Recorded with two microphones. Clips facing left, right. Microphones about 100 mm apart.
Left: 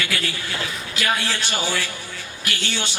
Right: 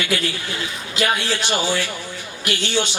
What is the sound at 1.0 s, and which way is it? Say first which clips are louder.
A man's voice: right 3 dB; 20° right (ahead or behind).